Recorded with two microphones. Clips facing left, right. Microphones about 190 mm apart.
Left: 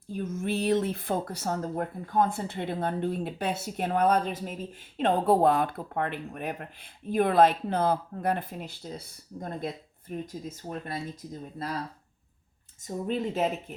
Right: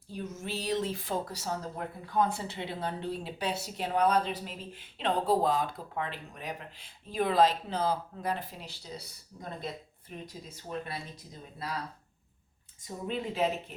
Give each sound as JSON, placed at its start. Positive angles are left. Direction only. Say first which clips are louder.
{"t": 0.1, "sound": "speech", "louder": "left 7 dB", "side_deg": 50}
{"t": 12.8, "sound": "speech", "louder": "left 5 dB", "side_deg": 45}